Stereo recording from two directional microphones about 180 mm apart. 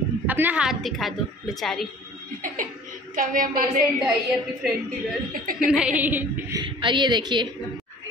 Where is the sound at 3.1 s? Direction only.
50° right (ahead or behind).